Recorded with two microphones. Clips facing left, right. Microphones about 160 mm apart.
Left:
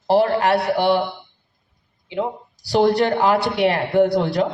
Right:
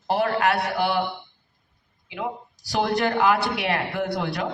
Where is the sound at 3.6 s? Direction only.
35° left (ahead or behind).